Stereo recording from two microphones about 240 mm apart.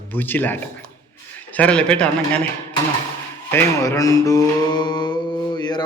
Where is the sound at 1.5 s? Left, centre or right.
Centre.